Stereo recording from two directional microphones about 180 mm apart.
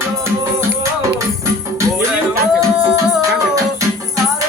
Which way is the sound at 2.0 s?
15° right (ahead or behind).